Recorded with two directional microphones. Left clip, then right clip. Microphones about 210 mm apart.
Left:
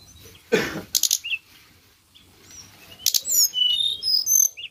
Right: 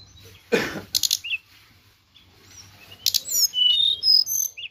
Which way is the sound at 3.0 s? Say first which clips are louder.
Left 1 dB; 15° right (ahead or behind).